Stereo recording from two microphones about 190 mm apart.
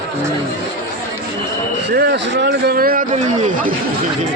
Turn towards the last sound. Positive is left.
turn(degrees=-50)  # may be behind; listen again after turning